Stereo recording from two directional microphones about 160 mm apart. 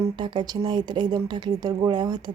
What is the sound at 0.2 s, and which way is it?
Speech, 30° right (ahead or behind).